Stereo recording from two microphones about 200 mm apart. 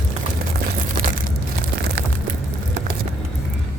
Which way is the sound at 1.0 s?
45° right (ahead or behind).